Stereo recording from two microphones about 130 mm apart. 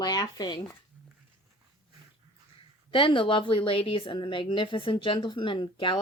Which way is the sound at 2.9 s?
40° left (ahead or behind).